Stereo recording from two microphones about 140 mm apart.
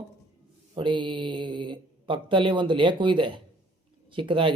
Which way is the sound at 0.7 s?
35° right (ahead or behind).